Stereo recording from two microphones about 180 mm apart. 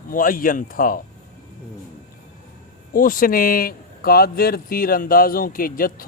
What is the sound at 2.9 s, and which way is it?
Speech, 50° left (ahead or behind).